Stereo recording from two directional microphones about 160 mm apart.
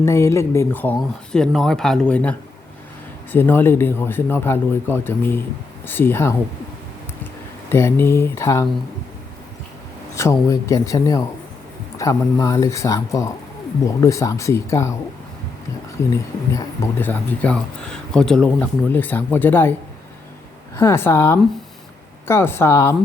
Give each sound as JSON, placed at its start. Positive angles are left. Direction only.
{"t": 0.0, "sound": "speech", "side_deg": 20}
{"t": 3.3, "sound": "speech", "side_deg": 15}
{"t": 7.7, "sound": "speech", "side_deg": 15}
{"t": 10.2, "sound": "speech", "side_deg": 15}
{"t": 16.0, "sound": "speech", "side_deg": 15}
{"t": 20.7, "sound": "speech", "side_deg": 15}